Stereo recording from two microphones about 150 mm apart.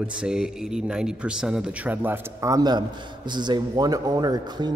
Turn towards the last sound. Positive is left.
turn(degrees=-25)  # may be behind; listen again after turning